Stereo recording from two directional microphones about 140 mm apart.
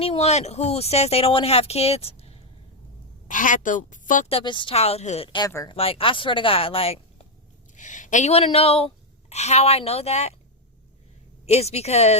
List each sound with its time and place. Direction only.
0.0 s speech: 45° left (ahead or behind)
3.2 s a woman's voice: 70° left (ahead or behind)
4.3 s speech: 40° left (ahead or behind)
4.7 s speech: 50° left (ahead or behind)
7.8 s speech: 65° left (ahead or behind)
11.4 s speech: 50° left (ahead or behind)